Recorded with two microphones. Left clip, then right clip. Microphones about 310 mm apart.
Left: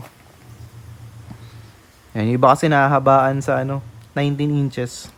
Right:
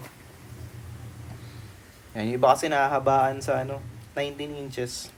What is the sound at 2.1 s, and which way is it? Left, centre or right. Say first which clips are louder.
Speech: left 6 dB; left.